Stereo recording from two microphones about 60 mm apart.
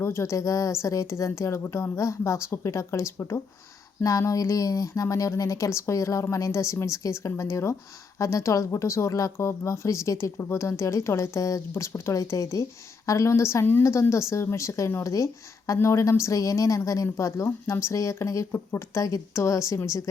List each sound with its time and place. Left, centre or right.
0.0 s speech: left
2.0 s speech: left
4.0 s speech: left